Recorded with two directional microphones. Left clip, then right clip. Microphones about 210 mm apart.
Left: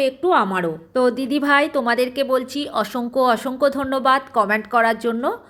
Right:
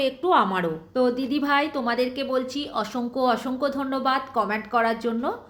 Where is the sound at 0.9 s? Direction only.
40° left (ahead or behind).